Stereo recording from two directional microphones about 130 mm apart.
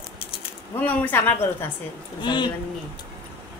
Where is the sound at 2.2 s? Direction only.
35° left (ahead or behind).